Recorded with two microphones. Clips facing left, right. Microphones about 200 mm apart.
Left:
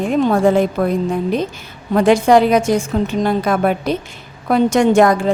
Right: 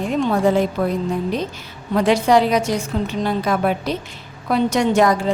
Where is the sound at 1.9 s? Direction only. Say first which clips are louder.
Left 4 dB; 50° left (ahead or behind).